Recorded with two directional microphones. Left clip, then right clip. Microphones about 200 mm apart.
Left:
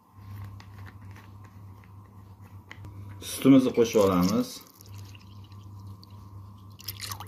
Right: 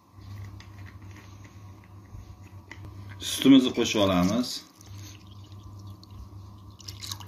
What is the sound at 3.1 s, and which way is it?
Speech, 30° left (ahead or behind).